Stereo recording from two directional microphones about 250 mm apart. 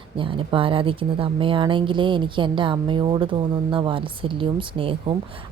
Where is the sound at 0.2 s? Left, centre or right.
Right.